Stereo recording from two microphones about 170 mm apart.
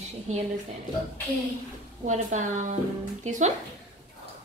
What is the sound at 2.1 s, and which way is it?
Speech, 45° right (ahead or behind).